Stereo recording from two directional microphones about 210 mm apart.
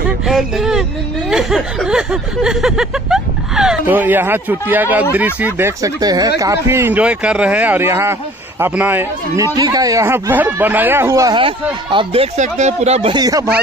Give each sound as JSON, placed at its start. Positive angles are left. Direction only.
{"t": 0.3, "sound": "speech", "side_deg": 0}
{"t": 1.3, "sound": "a sound", "side_deg": 0}
{"t": 5.1, "sound": "speech", "side_deg": -5}